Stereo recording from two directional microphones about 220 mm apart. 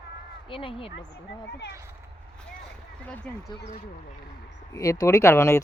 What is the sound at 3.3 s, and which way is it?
Speech, 5° left (ahead or behind).